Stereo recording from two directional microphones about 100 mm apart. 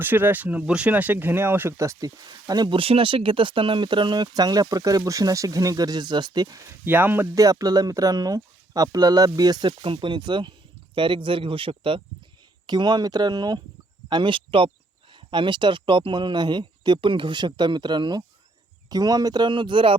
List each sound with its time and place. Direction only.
0.0 s speech: 20° right (ahead or behind); by 2.6 s 40° right (ahead or behind)
2.6 s speech: 70° right (ahead or behind); by 6.6 s 45° right (ahead or behind)
6.6 s speech: 20° right (ahead or behind)
7.3 s speech: 35° right (ahead or behind); by 12.0 s 65° right (ahead or behind)
12.6 s speech: 45° right (ahead or behind)
14.1 s speech: 55° right (ahead or behind)